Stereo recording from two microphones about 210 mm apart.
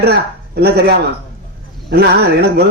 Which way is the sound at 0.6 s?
50° right (ahead or behind).